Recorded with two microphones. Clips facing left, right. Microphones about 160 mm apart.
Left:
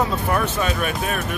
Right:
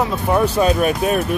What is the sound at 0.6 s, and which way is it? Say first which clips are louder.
Speech: right 7 dB; 40° right (ahead or behind).